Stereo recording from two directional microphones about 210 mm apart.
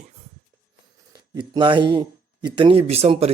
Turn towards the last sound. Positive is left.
turn(degrees=-30)  # may be behind; listen again after turning